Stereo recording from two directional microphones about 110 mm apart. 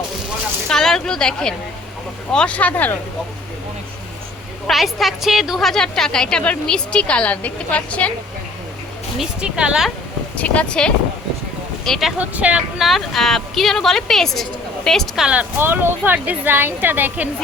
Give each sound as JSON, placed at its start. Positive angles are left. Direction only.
{"t": 0.7, "sound": "a woman's voice", "side_deg": 5}
{"t": 4.6, "sound": "a woman's voice", "side_deg": 0}
{"t": 9.1, "sound": "speech", "side_deg": -10}
{"t": 10.3, "sound": "a woman's voice", "side_deg": 10}
{"t": 12.2, "sound": "speech", "side_deg": -10}
{"t": 12.8, "sound": "a woman's voice", "side_deg": 0}